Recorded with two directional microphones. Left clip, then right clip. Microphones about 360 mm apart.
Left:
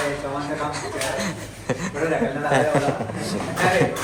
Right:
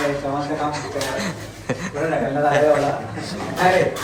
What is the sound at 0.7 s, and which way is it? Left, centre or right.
A man's voice, centre.